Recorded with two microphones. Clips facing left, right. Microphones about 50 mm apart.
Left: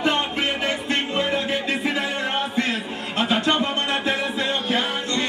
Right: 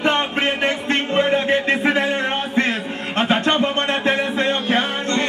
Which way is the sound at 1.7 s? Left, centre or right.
Right.